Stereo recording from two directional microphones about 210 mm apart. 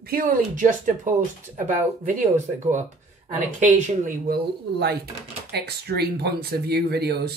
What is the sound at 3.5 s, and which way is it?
Speech, 35° right (ahead or behind).